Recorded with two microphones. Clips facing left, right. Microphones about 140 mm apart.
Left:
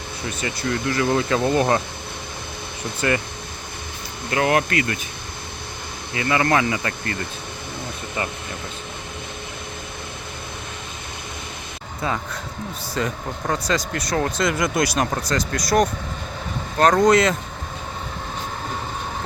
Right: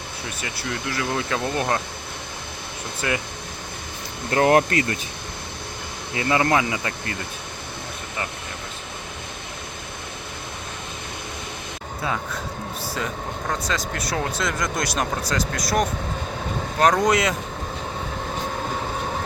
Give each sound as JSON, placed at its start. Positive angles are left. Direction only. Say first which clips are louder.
{"t": 0.4, "sound": "speech", "louder": "left 6 dB", "side_deg": -5}
{"t": 3.0, "sound": "speech", "louder": "left 4 dB", "side_deg": 0}
{"t": 4.3, "sound": "speech", "louder": "right 3 dB", "side_deg": -35}
{"t": 6.1, "sound": "speech", "louder": "left 1 dB", "side_deg": -25}
{"t": 13.0, "sound": "speech", "louder": "left 5 dB", "side_deg": -5}
{"t": 17.1, "sound": "speech", "louder": "left 4 dB", "side_deg": -10}